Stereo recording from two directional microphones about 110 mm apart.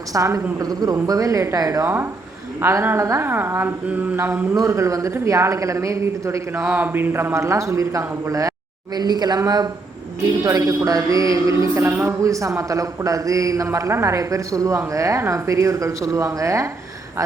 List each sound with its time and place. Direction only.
0.1 s speech: 30° right (ahead or behind)
0.6 s music: 35° right (ahead or behind)
2.6 s speech: 20° right (ahead or behind)
3.8 s mantra: 15° right (ahead or behind)
4.5 s speech: 30° right (ahead or behind)
9.0 s music: 40° right (ahead or behind)
11.7 s speech: 25° right (ahead or behind)